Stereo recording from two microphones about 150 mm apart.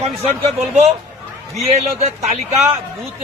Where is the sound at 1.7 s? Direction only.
45° right (ahead or behind).